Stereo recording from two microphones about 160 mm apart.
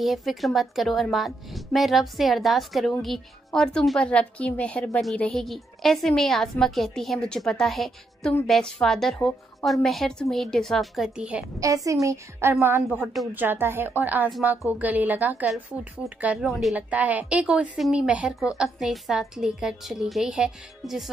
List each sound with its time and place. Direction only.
0.0 s a woman's voice: centre (ahead or behind)
11.6 s a woman's voice: 20° right (ahead or behind)
13.0 s a woman's voice: centre (ahead or behind)
13.3 s a woman's voice: 10° right (ahead or behind)